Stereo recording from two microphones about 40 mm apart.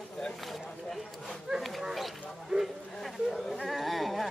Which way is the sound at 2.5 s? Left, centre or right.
Right.